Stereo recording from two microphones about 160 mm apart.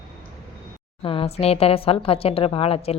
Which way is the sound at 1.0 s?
35° left (ahead or behind).